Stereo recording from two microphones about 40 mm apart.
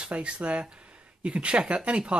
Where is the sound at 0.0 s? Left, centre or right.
Right.